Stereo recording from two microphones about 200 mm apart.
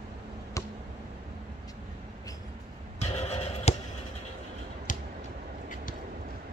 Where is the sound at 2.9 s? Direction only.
35° left (ahead or behind).